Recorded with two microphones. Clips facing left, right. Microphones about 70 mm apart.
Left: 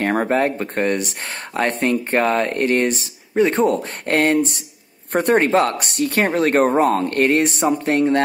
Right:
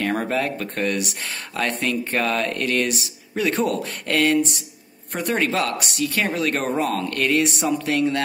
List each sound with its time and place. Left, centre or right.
0.0 s speech: left
5.1 s speech: left
5.4 s speech: left